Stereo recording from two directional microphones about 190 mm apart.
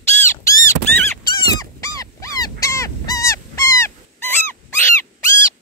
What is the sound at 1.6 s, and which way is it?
Dog, 20° left (ahead or behind).